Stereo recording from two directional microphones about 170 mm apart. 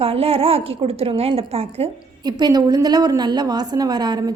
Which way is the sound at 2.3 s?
25° right (ahead or behind).